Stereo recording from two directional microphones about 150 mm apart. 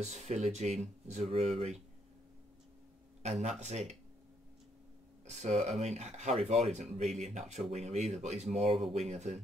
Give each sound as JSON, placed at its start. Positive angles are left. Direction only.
{"t": 0.0, "sound": "speech", "side_deg": -45}
{"t": 3.2, "sound": "speech", "side_deg": -45}
{"t": 5.2, "sound": "speech", "side_deg": -50}